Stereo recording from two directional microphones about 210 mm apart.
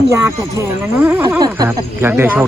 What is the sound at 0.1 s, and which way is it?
Speech, 10° right (ahead or behind).